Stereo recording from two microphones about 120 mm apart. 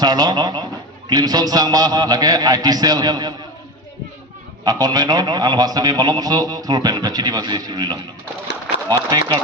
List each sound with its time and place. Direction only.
0.0 s a man's voice: 35° right (ahead or behind)
4.6 s a man's voice: 30° right (ahead or behind)